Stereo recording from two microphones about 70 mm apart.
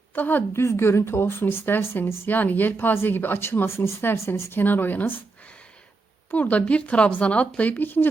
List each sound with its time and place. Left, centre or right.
0.1 s a woman's voice: left
0.5 s speech: left
6.3 s speech: left